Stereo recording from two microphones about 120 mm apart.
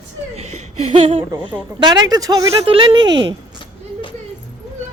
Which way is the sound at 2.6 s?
45° right (ahead or behind).